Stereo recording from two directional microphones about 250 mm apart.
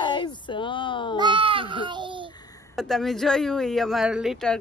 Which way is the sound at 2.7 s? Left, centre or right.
Centre.